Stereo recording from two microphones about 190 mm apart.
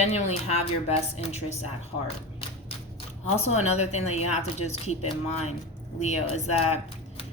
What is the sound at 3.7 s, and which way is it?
Speech, 35° left (ahead or behind).